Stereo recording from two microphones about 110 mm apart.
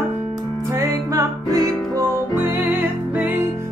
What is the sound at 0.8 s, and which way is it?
Music, 30° right (ahead or behind).